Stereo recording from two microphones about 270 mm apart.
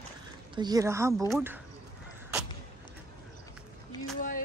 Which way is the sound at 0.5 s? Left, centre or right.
Centre.